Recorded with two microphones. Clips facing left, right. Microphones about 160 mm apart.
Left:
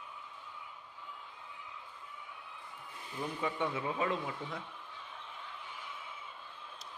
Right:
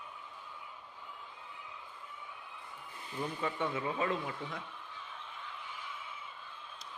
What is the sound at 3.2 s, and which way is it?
Speech, 10° left (ahead or behind).